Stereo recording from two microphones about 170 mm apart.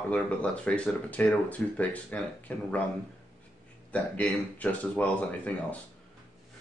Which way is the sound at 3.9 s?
10° left (ahead or behind).